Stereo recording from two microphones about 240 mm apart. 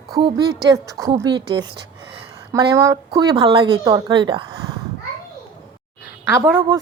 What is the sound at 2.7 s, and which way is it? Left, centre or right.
A woman's voice, centre.